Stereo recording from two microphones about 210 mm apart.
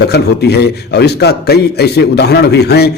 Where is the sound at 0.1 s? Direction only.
50° left (ahead or behind).